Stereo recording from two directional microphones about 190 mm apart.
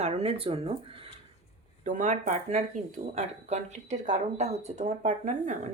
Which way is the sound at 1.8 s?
40° right (ahead or behind).